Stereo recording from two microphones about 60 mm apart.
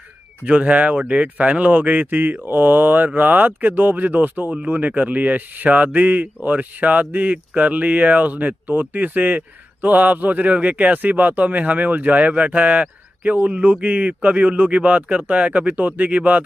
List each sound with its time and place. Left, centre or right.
0.5 s speech: right